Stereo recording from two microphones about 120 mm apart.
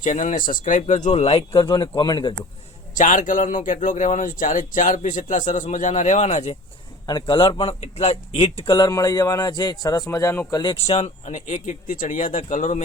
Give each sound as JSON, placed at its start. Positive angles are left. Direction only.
{"t": 0.0, "sound": "a man's voice", "side_deg": 90}
{"t": 1.1, "sound": "speech", "side_deg": 55}
{"t": 1.7, "sound": "speech", "side_deg": 40}
{"t": 2.9, "sound": "a man's voice", "side_deg": 90}
{"t": 7.1, "sound": "speech", "side_deg": 40}
{"t": 8.6, "sound": "speech", "side_deg": 35}
{"t": 10.5, "sound": "speech", "side_deg": 40}
{"t": 10.8, "sound": "a man's voice", "side_deg": 60}